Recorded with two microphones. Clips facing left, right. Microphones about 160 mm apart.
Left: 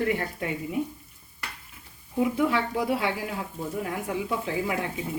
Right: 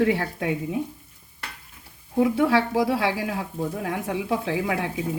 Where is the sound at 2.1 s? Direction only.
85° right.